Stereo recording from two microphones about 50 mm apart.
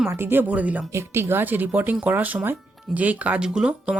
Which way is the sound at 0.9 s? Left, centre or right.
Right.